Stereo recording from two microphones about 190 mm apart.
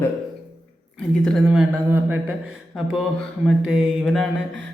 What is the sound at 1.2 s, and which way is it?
Speech, centre (ahead or behind).